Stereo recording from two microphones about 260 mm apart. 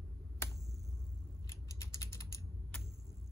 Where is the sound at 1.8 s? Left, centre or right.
Centre.